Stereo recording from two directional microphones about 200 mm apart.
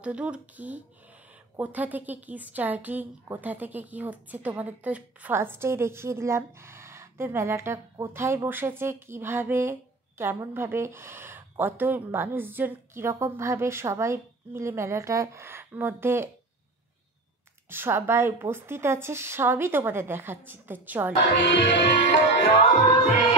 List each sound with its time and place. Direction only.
0.0 s a woman's voice: 5° right (ahead or behind)
17.6 s a woman's voice: 10° right (ahead or behind)
21.4 s music: 65° left (ahead or behind)
22.3 s music: 45° left (ahead or behind)